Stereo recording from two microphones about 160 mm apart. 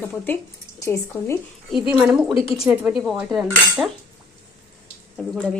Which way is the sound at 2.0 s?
5° right (ahead or behind).